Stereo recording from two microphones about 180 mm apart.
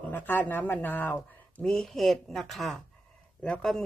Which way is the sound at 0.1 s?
10° left (ahead or behind).